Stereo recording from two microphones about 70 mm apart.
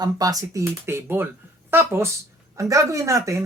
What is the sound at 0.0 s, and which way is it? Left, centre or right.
Speech, right.